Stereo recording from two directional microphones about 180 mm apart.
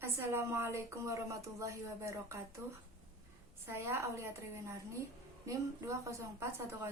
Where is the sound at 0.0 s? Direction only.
15° right (ahead or behind).